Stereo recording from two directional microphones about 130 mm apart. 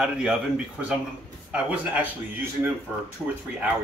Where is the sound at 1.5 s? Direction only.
10° right (ahead or behind).